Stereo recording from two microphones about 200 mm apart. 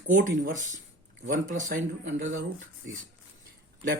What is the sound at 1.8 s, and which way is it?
Speech, 70° right (ahead or behind).